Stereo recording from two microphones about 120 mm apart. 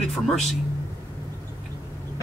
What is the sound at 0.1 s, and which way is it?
Speech, centre (ahead or behind).